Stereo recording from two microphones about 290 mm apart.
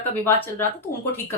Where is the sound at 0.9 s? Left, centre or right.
Left.